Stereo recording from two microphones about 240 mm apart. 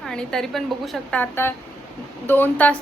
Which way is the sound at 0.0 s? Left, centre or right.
Centre.